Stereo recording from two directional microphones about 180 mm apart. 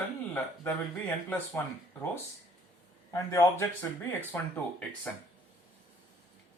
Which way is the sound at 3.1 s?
15° left (ahead or behind).